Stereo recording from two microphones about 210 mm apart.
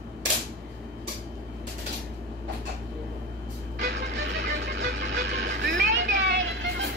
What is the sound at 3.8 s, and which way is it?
Music, 60° right (ahead or behind).